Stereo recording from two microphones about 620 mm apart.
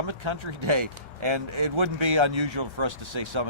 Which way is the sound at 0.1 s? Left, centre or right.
Right.